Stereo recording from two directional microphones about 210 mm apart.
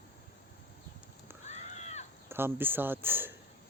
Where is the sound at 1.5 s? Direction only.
30° left (ahead or behind).